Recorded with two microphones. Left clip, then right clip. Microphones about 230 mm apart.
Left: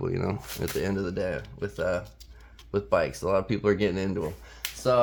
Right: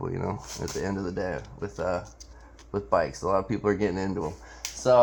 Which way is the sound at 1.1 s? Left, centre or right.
Left.